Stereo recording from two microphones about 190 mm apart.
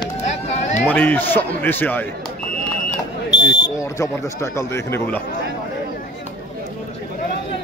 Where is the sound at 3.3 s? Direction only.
65° left (ahead or behind).